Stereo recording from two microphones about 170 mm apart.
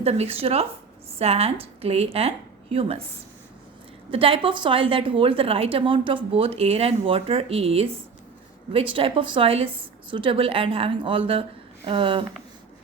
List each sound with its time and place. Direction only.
0.0 s a woman's voice: 35° right (ahead or behind)
4.1 s a woman's voice: 35° right (ahead or behind)